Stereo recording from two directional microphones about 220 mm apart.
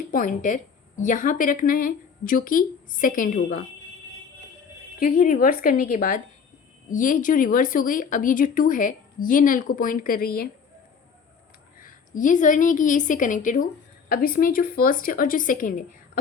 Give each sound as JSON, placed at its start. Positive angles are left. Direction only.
{"t": 0.1, "sound": "a woman's voice", "side_deg": 35}
{"t": 4.9, "sound": "a woman's voice", "side_deg": 40}
{"t": 11.8, "sound": "a woman's voice", "side_deg": 35}